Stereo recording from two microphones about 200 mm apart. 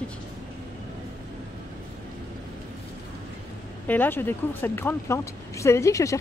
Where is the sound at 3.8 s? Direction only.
10° left (ahead or behind).